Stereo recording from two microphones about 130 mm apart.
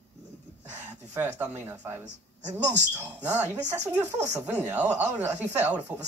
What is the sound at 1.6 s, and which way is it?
Speech, 15° right (ahead or behind).